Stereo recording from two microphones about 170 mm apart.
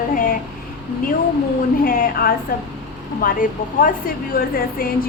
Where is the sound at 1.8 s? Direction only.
55° left (ahead or behind).